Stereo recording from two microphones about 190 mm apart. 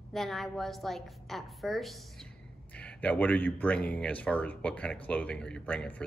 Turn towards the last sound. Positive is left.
turn(degrees=5)  # may be behind; listen again after turning